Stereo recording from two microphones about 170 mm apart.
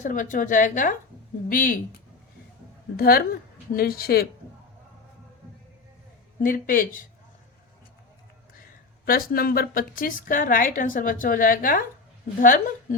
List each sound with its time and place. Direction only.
0.0 s a woman's voice: 50° left (ahead or behind)
6.4 s a woman's voice: 55° left (ahead or behind)
9.0 s a woman's voice: 60° left (ahead or behind)